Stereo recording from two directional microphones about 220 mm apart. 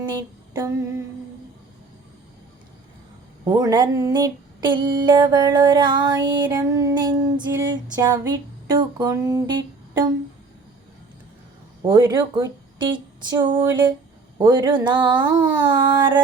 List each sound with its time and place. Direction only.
3.4 s female singing: 15° right (ahead or behind)
11.8 s speech: 20° right (ahead or behind)
13.6 s a sound: 15° right (ahead or behind)
14.3 s female singing: 15° right (ahead or behind)